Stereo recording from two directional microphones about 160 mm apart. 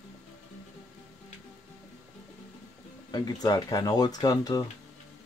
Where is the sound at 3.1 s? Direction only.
25° left (ahead or behind).